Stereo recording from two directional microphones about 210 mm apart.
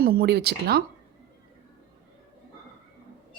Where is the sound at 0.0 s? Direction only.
45° right (ahead or behind).